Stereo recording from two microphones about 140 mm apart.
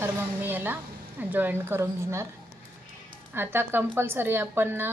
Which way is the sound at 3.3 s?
15° right (ahead or behind).